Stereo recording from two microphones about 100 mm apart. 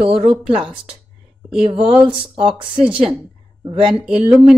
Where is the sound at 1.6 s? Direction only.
70° right (ahead or behind).